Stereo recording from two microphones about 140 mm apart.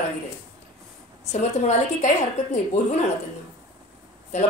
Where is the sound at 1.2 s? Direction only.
50° left (ahead or behind).